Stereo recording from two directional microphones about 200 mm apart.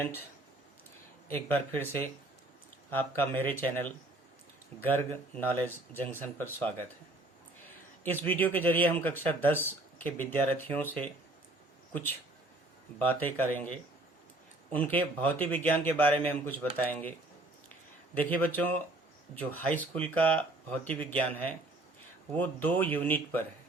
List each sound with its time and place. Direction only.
1.3 s speech: 10° left (ahead or behind)
8.0 s speech: 10° left (ahead or behind)
13.0 s speech: 10° left (ahead or behind)
18.2 s speech: 10° left (ahead or behind)